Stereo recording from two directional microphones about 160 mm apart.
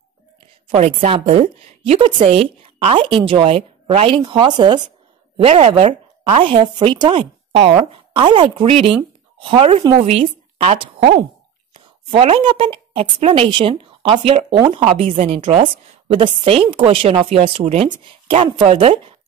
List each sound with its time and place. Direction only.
0.7 s a woman's voice: 40° right (ahead or behind)
5.4 s a woman's voice: 40° right (ahead or behind)
12.1 s a woman's voice: 35° right (ahead or behind)
18.0 s a woman's voice: 35° right (ahead or behind)